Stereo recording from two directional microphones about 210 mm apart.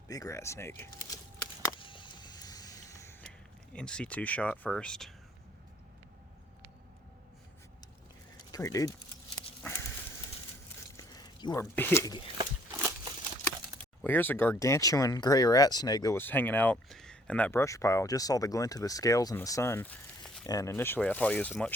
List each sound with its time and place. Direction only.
0.1 s a sound: 15° left (ahead or behind)
3.7 s speech: 5° left (ahead or behind)
8.5 s speech: 15° left (ahead or behind)
10.9 s a sound: 20° left (ahead or behind)
11.6 s speech: 10° left (ahead or behind)
14.0 s speech: 10° left (ahead or behind)
20.5 s speech: 15° left (ahead or behind)